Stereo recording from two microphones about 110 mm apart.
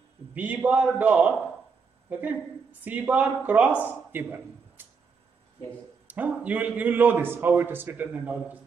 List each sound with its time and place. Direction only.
0.3 s a man's voice: 15° right (ahead or behind)
4.1 s a sound: 20° right (ahead or behind)
6.0 s a man's voice: 15° right (ahead or behind)